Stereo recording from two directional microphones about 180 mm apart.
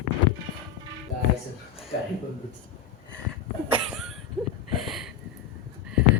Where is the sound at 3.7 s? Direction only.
5° right (ahead or behind).